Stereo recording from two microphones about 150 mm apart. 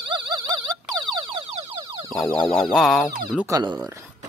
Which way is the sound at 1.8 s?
30° right (ahead or behind).